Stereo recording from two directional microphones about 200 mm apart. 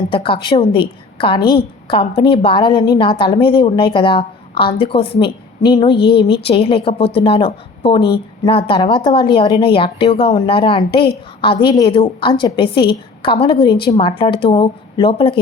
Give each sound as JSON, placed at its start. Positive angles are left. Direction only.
{"t": 0.1, "sound": "a woman's voice", "side_deg": 25}